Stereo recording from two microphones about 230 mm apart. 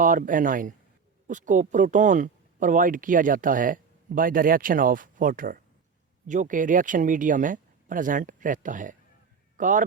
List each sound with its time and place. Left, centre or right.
0.0 s a man's voice: right